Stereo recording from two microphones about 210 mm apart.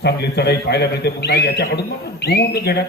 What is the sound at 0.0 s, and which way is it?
A man's voice, 50° left (ahead or behind).